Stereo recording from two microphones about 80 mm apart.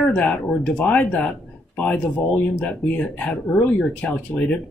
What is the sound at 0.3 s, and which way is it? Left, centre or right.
Speech, centre.